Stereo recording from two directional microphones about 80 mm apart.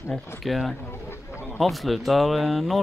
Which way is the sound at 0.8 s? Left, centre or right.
Left.